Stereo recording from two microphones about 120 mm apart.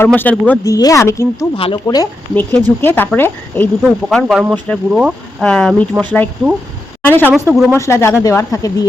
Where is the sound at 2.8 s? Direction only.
15° left (ahead or behind).